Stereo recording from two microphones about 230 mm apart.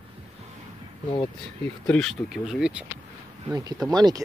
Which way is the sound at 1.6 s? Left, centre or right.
Centre.